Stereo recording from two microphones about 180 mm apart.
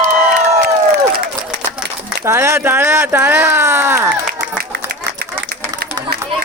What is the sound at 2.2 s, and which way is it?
Speech, 15° right (ahead or behind).